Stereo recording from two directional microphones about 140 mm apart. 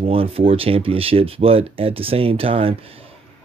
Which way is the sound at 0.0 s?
45° right (ahead or behind).